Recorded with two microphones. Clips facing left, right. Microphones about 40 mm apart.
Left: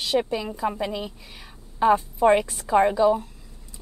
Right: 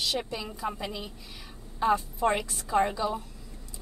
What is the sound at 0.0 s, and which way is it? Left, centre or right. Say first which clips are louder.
A woman's voice: left 7 dB; left.